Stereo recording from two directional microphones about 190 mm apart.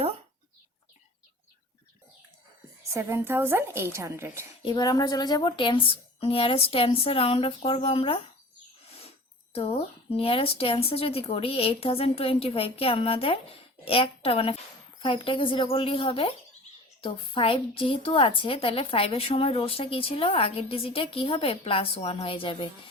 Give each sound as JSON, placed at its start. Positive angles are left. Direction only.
{"t": 2.9, "sound": "a woman's voice", "side_deg": -15}
{"t": 4.6, "sound": "a woman's voice", "side_deg": 20}